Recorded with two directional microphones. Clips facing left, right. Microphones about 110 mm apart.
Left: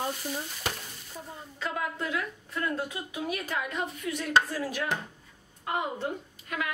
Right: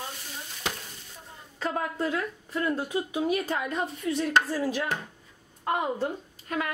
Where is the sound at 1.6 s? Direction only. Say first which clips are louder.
Right 4 dB; 35° right (ahead or behind).